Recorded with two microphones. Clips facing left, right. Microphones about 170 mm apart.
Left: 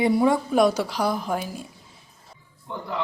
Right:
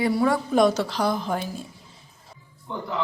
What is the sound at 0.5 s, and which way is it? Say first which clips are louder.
A woman's voice: even; 10° left (ahead or behind).